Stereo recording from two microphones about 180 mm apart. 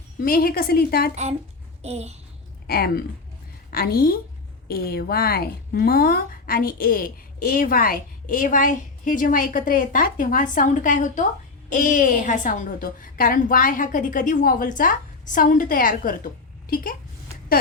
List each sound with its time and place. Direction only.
0.2 s a woman's voice: 55° left (ahead or behind)
1.1 s a child's voice: 40° right (ahead or behind)
2.6 s a woman's voice: 60° left (ahead or behind)